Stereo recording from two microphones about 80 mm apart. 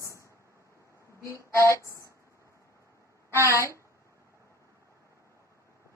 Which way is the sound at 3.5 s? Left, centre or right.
Right.